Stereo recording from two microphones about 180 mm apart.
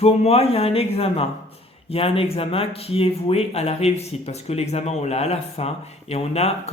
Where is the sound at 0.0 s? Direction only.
35° left (ahead or behind).